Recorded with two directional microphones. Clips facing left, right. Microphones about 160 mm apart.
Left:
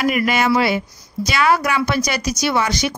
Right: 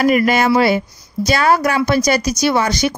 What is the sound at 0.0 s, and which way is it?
Speech, 40° right (ahead or behind).